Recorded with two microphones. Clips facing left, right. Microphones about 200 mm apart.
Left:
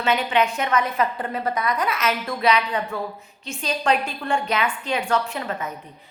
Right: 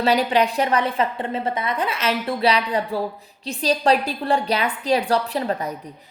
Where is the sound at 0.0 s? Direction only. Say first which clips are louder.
Right 3 dB; 35° right (ahead or behind).